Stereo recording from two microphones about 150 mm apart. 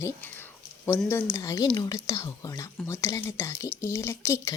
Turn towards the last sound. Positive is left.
turn(degrees=20)  # may be behind; listen again after turning